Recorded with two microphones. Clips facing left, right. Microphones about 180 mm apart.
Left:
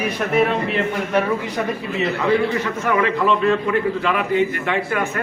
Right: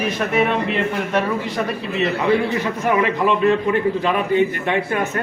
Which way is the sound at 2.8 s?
20° right (ahead or behind).